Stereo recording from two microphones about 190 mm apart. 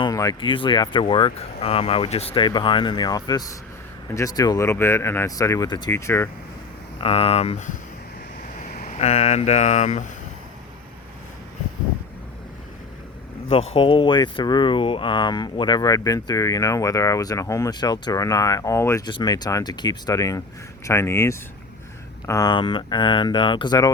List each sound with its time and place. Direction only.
0.0 s speech: 20° left (ahead or behind)
7.0 s speech: 30° left (ahead or behind)
13.5 s speech: 30° left (ahead or behind)